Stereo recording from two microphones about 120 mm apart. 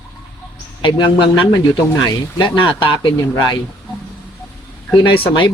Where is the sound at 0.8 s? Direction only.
40° left (ahead or behind).